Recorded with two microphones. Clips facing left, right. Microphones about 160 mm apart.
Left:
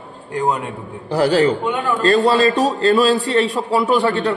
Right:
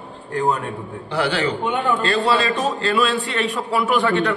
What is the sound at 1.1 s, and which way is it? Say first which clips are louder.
A man's voice: left 7 dB; 35° left (ahead or behind).